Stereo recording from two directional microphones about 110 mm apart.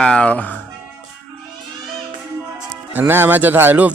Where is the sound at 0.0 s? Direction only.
10° left (ahead or behind).